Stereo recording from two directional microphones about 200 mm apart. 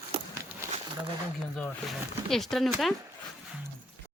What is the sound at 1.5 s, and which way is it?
Speech, centre (ahead or behind).